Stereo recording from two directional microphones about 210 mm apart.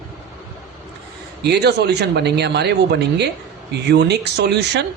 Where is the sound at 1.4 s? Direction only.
50° right (ahead or behind).